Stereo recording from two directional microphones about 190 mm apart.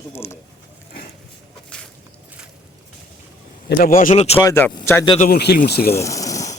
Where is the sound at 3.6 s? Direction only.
50° left (ahead or behind); by 4.4 s 35° left (ahead or behind).